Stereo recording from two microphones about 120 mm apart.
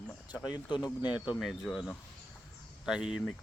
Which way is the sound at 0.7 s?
40° left (ahead or behind).